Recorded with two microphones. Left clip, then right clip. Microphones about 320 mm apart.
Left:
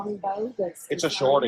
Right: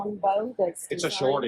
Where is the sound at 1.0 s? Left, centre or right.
Centre.